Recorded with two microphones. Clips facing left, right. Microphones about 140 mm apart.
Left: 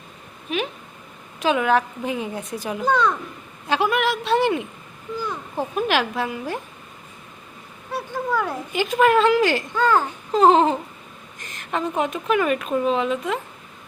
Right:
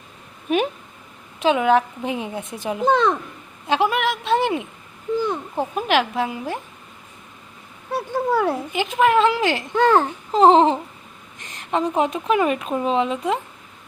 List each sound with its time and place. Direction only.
1.4 s a child's voice: 20° right (ahead or behind)
7.9 s speech: 25° right (ahead or behind)
8.7 s a child's voice: 15° right (ahead or behind)